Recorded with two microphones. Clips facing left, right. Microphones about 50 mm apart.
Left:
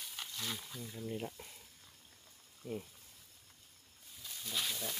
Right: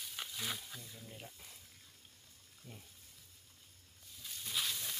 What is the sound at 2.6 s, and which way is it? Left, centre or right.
Speech, left.